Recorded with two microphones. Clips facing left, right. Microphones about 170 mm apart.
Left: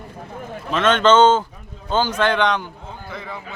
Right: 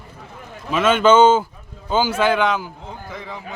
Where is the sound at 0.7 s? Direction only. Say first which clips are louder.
Right 1 dB; 10° right (ahead or behind).